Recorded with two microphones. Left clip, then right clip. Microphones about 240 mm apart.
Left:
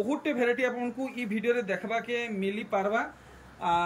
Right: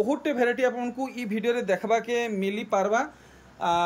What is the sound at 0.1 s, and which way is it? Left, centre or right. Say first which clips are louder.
A man's voice: right 3 dB; centre.